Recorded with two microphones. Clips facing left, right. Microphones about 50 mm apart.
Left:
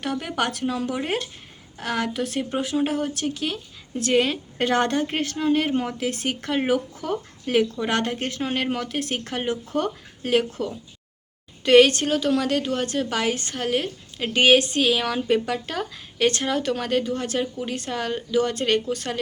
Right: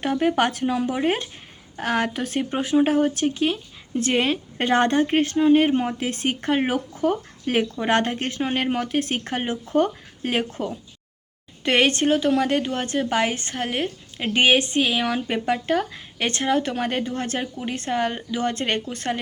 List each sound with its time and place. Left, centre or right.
0.0 s a woman's voice: right
1.7 s a woman's voice: right
17.4 s a woman's voice: right